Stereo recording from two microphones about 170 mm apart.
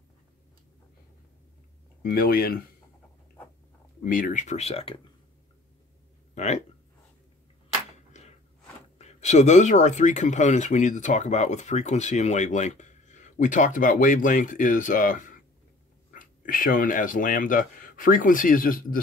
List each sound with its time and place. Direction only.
2.0 s speech: 60° left (ahead or behind)
4.0 s speech: 55° left (ahead or behind); by 4.9 s 35° left (ahead or behind)
6.3 s speech: 40° left (ahead or behind)
8.1 s a sound: 40° left (ahead or behind)
8.9 s speech: 40° left (ahead or behind)